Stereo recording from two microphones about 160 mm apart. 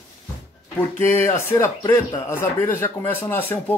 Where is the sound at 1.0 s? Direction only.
15° left (ahead or behind).